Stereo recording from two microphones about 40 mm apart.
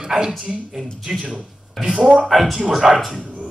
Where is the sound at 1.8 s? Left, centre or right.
Right.